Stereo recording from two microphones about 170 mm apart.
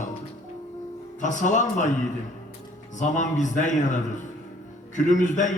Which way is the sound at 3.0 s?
45° left (ahead or behind).